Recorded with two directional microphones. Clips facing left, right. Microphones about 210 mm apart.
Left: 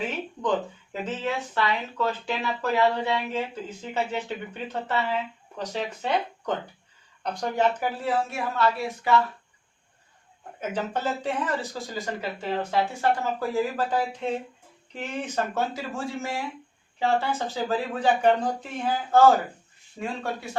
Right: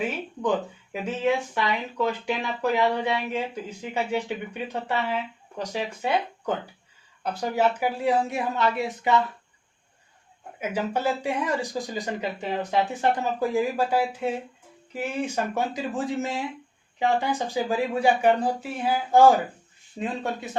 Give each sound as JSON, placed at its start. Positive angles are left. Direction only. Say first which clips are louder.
{"t": 1.0, "sound": "speech", "louder": "right 5 dB", "side_deg": -15}
{"t": 10.6, "sound": "speech", "louder": "right 2 dB", "side_deg": -10}